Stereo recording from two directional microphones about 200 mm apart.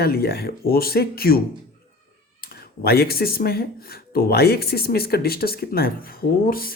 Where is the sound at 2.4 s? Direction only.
50° left (ahead or behind).